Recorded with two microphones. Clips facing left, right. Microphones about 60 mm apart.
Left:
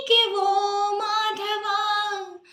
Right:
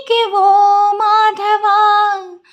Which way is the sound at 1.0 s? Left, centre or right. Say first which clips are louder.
Right 13 dB; right.